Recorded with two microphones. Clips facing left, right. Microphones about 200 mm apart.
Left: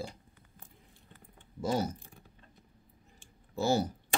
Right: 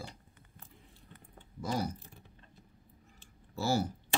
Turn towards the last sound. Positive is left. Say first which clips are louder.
# left 3 dB
turn(degrees=20)  # may be behind; listen again after turning